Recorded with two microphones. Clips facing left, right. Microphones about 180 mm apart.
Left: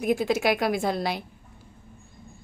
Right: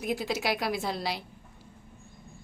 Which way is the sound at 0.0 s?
50° left (ahead or behind).